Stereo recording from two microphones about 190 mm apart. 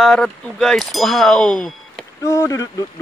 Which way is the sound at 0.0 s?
Centre (ahead or behind).